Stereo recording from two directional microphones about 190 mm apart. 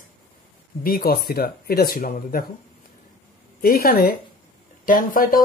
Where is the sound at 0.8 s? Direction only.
50° left (ahead or behind).